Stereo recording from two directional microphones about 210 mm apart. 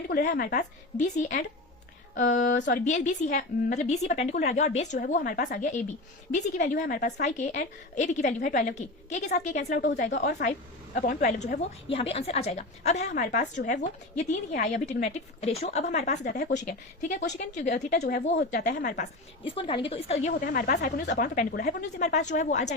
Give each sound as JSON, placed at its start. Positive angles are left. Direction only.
{"t": 0.1, "sound": "a woman's voice", "side_deg": 40}
{"t": 11.9, "sound": "a woman's voice", "side_deg": 25}
{"t": 14.6, "sound": "a woman's voice", "side_deg": 35}
{"t": 19.5, "sound": "a woman's voice", "side_deg": 25}
{"t": 20.4, "sound": "a woman's voice", "side_deg": 45}